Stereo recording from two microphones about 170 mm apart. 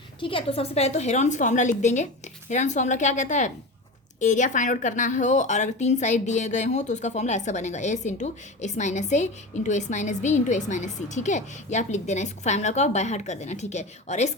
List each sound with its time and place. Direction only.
0.2 s a woman's voice: 30° left (ahead or behind)